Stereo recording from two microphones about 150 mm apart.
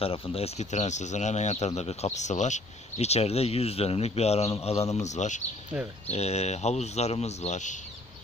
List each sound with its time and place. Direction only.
0.0 s speech: 40° left (ahead or behind)